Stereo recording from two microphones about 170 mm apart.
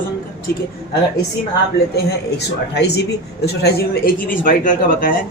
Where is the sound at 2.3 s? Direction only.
80° left.